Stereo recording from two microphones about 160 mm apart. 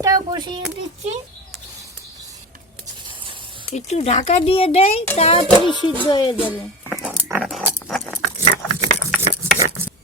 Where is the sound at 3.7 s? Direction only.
45° left (ahead or behind).